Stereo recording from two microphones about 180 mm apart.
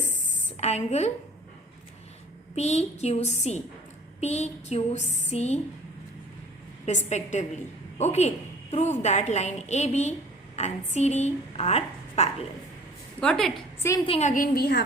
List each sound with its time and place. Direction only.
0.5 s a woman's voice: 35° left (ahead or behind)
2.6 s a woman's voice: 35° left (ahead or behind)
7.1 s a woman's voice: 40° left (ahead or behind)
13.1 s a woman's voice: 5° left (ahead or behind)
14.0 s a woman's voice: 35° left (ahead or behind); by 14.8 s 60° left (ahead or behind)